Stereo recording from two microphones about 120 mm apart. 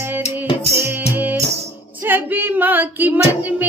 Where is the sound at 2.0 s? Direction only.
15° right (ahead or behind).